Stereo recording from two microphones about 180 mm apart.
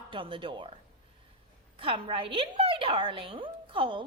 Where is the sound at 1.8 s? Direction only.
30° right (ahead or behind).